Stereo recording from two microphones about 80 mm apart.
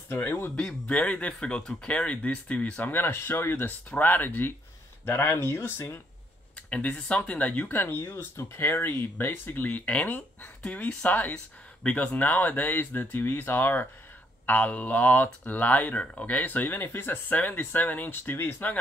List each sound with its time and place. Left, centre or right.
0.1 s speech: left
0.6 s speech: centre; by 5.9 s left
6.5 s speech: centre